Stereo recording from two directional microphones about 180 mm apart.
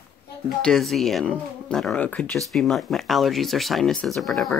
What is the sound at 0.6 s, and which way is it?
Speech, centre (ahead or behind).